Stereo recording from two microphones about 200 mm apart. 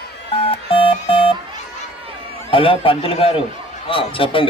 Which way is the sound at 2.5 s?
25° left (ahead or behind).